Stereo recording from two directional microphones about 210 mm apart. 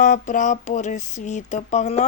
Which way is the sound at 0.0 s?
35° left (ahead or behind).